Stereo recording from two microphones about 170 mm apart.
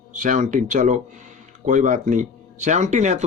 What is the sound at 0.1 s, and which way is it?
Speech, 50° right (ahead or behind).